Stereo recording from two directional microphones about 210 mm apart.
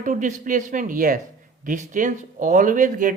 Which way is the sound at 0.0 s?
40° right (ahead or behind).